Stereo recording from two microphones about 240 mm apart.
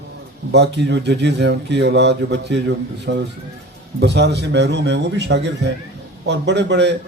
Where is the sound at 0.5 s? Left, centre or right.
Right.